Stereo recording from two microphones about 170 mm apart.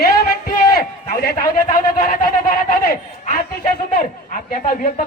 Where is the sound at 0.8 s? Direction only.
60° left (ahead or behind).